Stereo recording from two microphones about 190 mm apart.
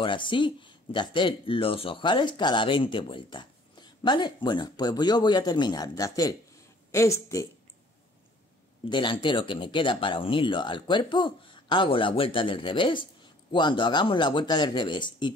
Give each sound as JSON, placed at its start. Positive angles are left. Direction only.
{"t": 0.0, "sound": "speech", "side_deg": 25}
{"t": 8.8, "sound": "speech", "side_deg": 25}